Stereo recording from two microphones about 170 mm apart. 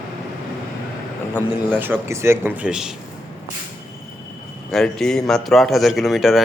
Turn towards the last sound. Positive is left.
turn(degrees=0)  # may be behind; listen again after turning